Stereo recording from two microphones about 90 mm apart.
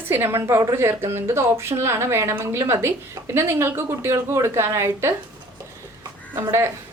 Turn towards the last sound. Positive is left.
turn(degrees=-30)  # may be behind; listen again after turning